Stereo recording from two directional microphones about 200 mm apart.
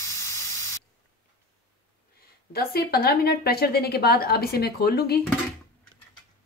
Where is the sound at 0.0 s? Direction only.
15° left (ahead or behind).